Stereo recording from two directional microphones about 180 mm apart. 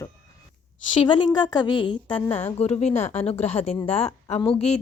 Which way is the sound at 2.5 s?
35° left (ahead or behind).